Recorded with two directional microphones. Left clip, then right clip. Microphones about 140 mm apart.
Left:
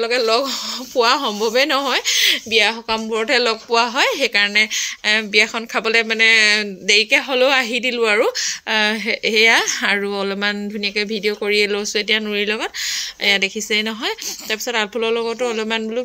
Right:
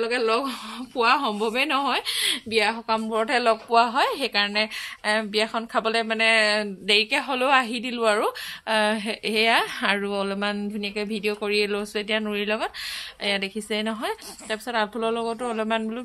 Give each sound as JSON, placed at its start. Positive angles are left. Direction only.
{"t": 0.0, "sound": "speech", "side_deg": 30}